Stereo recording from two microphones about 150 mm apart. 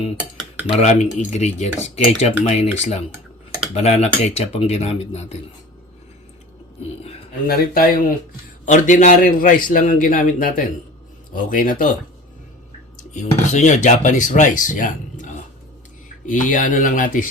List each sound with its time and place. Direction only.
0.7 s speech: 50° left (ahead or behind)
7.4 s speech: 80° left
8.6 s speech: 60° left (ahead or behind)
13.0 s speech: 55° left (ahead or behind)